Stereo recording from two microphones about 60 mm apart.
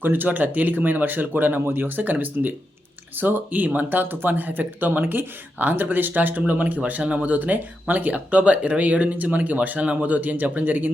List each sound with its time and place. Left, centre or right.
0.0 s speech: right